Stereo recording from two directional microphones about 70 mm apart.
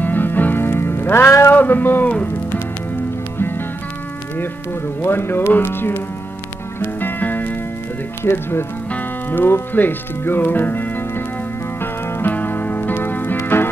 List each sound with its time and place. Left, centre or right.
0.0 s music: left
1.5 s a sound: left
5.0 s speech: left
6.8 s music: left
8.2 s speech: left
11.8 s music: left